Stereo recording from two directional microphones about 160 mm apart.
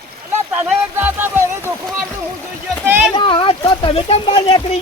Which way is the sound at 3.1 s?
30° left (ahead or behind).